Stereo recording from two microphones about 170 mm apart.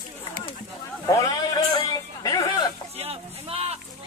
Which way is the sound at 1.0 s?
25° left (ahead or behind).